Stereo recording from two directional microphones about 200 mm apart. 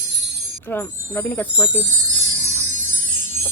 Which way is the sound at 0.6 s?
10° left (ahead or behind).